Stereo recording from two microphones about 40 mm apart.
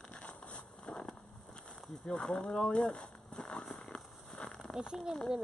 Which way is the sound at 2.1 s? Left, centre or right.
Centre.